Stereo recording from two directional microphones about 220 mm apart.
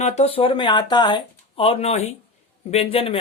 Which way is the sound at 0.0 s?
30° left (ahead or behind).